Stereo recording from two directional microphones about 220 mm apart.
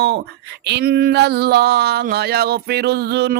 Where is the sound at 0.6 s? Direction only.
50° right (ahead or behind).